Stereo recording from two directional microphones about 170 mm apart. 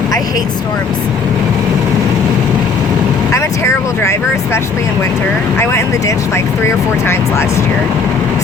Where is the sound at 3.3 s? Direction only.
15° left (ahead or behind).